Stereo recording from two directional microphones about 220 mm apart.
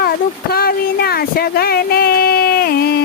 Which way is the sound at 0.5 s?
45° left (ahead or behind).